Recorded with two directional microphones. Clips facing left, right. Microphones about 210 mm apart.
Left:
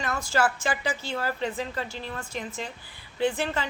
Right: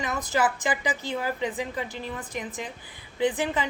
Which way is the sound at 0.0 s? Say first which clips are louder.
Even; 20° right (ahead or behind).